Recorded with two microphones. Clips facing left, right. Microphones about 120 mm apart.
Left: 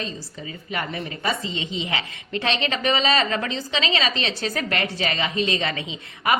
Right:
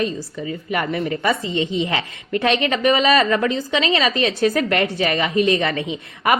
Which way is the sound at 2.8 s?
45° right (ahead or behind).